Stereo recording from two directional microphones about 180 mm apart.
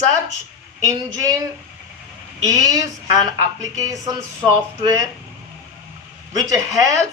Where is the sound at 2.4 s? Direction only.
20° right (ahead or behind).